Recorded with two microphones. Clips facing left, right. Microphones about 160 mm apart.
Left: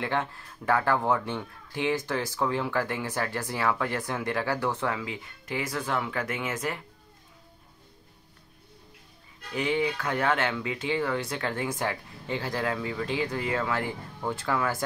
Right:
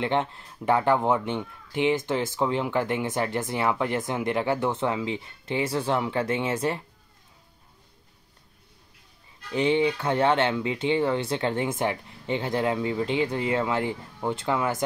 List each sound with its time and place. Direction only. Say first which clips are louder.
0.0 s speech: right 4 dB; 20° right (ahead or behind)
9.5 s speech: right 5 dB; 25° right (ahead or behind)